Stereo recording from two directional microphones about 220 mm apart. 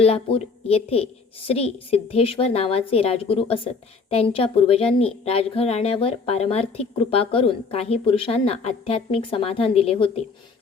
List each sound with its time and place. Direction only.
0.0 s a woman's voice: 25° left (ahead or behind)